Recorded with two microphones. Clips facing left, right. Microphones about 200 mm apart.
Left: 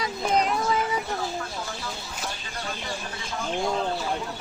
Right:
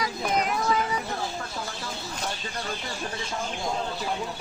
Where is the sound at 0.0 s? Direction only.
30° left (ahead or behind).